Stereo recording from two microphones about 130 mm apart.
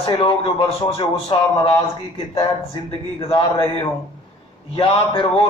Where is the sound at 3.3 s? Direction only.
45° left (ahead or behind).